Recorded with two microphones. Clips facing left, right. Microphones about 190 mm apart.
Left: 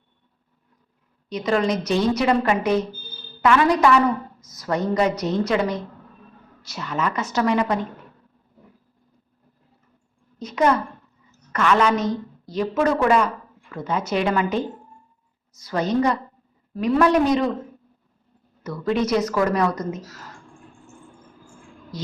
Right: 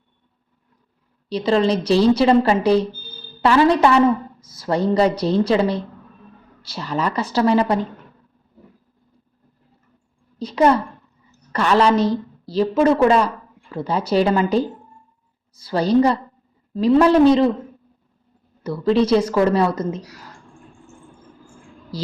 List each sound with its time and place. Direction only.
1.3 s a woman's voice: 30° right (ahead or behind)
10.3 s a woman's voice: 30° right (ahead or behind)
18.6 s speech: 30° right (ahead or behind)
21.9 s a sound: 35° right (ahead or behind)